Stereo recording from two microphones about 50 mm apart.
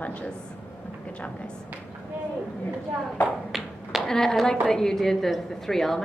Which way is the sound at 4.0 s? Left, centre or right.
Centre.